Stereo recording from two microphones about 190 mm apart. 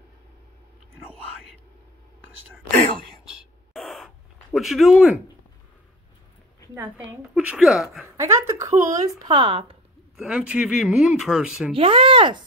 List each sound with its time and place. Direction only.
3.3 s a sound: centre (ahead or behind)
6.7 s speech: 10° right (ahead or behind)
8.2 s speech: 15° right (ahead or behind)
10.1 s speech: 5° right (ahead or behind)
11.7 s speech: 30° right (ahead or behind)